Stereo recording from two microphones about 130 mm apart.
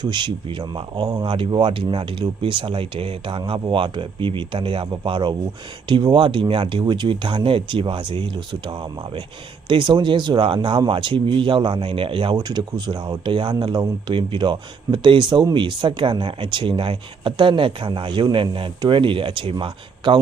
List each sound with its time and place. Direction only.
0.0 s speech: 35° right (ahead or behind)